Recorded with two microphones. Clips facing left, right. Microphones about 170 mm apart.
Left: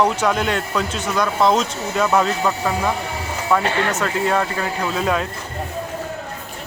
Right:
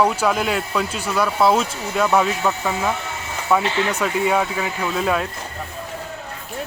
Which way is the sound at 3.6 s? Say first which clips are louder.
Left 1 dB; 55° left (ahead or behind).